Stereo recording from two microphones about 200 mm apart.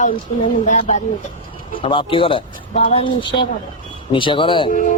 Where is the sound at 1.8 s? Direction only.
25° left (ahead or behind).